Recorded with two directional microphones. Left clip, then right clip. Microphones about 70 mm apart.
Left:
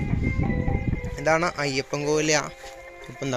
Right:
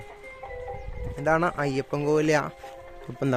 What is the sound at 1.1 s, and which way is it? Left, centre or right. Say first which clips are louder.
Speech: left 1 dB; right.